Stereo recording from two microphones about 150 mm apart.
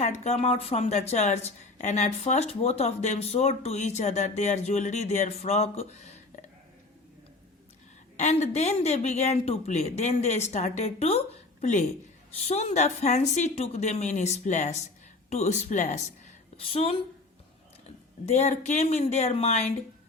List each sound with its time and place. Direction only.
0.0 s speech: 50° left (ahead or behind)
8.1 s a woman's voice: 50° left (ahead or behind)
16.6 s a woman's voice: 40° left (ahead or behind)